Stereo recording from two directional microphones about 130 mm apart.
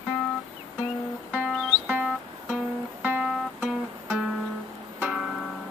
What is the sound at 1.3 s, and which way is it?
Music, 10° right (ahead or behind).